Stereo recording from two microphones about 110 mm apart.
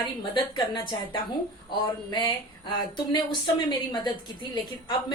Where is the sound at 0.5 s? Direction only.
45° left (ahead or behind).